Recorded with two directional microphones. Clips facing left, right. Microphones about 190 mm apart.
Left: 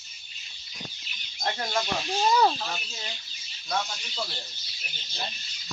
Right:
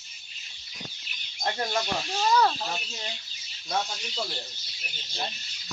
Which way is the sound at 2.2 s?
15° left (ahead or behind).